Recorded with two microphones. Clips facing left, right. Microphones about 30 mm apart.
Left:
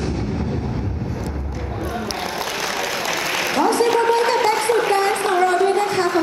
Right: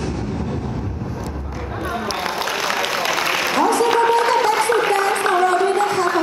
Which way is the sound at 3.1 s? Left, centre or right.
Centre.